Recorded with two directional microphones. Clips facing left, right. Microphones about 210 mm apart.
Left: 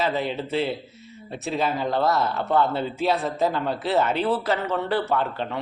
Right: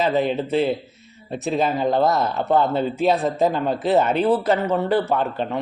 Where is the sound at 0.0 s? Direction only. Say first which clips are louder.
Right 5 dB; 15° right (ahead or behind).